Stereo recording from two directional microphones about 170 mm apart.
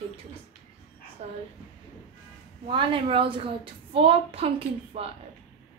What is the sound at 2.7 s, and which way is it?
A woman's voice, 30° right (ahead or behind).